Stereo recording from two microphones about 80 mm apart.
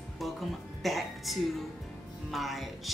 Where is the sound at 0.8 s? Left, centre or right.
Centre.